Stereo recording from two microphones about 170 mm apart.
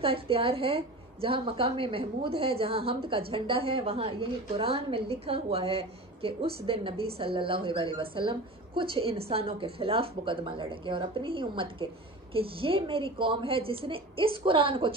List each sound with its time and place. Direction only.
0.0 s a woman's voice: 35° right (ahead or behind)